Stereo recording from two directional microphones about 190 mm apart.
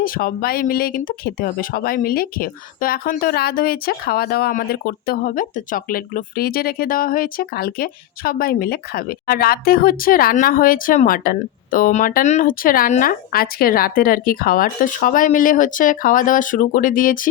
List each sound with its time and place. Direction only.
0.0 s speech: 50° left (ahead or behind)